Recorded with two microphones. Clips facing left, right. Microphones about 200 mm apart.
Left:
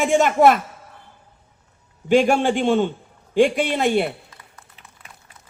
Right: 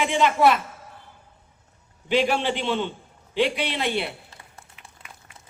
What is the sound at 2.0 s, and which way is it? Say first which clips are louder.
Speech: left 6 dB; 45° left (ahead or behind).